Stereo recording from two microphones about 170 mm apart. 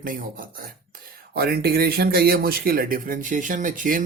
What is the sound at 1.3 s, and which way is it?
A man's voice, 65° right (ahead or behind).